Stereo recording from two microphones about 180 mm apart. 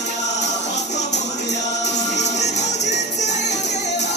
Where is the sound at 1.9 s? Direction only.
40° left (ahead or behind).